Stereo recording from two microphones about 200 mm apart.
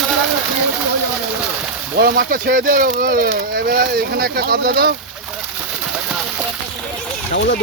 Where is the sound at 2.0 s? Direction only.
50° right (ahead or behind).